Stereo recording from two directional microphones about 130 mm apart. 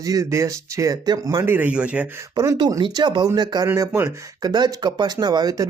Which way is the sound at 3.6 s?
20° right (ahead or behind).